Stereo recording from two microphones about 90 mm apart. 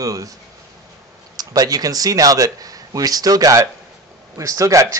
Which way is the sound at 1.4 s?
45° right (ahead or behind).